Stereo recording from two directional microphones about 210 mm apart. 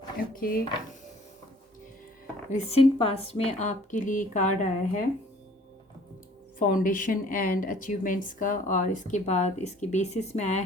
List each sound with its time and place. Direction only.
0.2 s speech: 45° left (ahead or behind)
2.5 s a woman's voice: 30° left (ahead or behind)
6.6 s a woman's voice: 40° left (ahead or behind)